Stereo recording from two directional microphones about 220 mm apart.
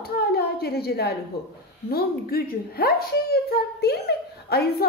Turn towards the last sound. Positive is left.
turn(degrees=45)  # may be behind; listen again after turning